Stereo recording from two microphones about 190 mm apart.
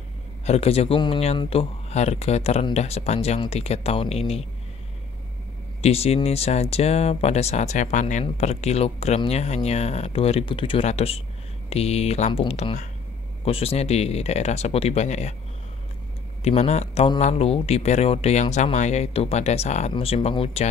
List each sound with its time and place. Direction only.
0.5 s speech: 30° left (ahead or behind)
5.8 s speech: 35° left (ahead or behind)
16.4 s speech: 35° left (ahead or behind)